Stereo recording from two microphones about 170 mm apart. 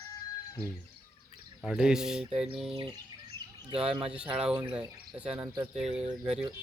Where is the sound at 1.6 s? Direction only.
5° right (ahead or behind).